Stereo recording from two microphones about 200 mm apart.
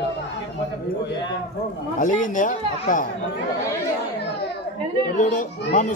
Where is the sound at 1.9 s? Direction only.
40° left (ahead or behind).